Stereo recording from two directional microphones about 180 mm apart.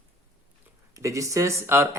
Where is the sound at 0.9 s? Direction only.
20° right (ahead or behind).